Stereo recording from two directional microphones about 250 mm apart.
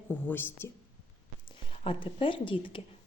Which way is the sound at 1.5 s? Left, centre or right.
Centre.